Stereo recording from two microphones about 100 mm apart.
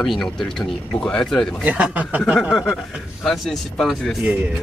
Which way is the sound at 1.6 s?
15° right (ahead or behind).